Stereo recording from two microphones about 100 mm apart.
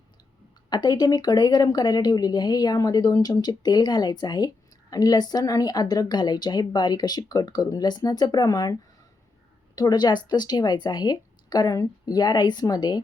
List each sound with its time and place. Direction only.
0.7 s speech: 45° left (ahead or behind)
9.7 s speech: 45° left (ahead or behind)